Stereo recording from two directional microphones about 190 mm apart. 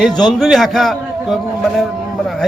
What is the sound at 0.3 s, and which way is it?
A man's voice, centre (ahead or behind).